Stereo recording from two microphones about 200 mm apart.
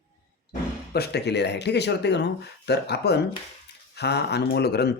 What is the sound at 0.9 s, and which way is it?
Speech, 55° left (ahead or behind).